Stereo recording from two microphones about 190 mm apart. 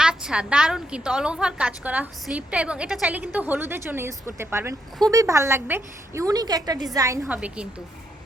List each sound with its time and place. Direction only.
0.0 s a woman's voice: 5° right (ahead or behind)
7.3 s a woman's voice: 5° right (ahead or behind)